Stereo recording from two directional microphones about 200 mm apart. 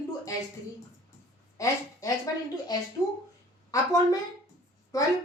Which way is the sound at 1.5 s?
15° left (ahead or behind).